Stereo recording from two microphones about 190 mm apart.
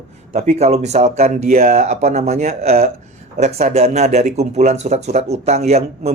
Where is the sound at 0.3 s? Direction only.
35° right (ahead or behind).